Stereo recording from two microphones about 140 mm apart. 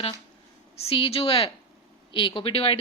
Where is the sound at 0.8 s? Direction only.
45° left (ahead or behind).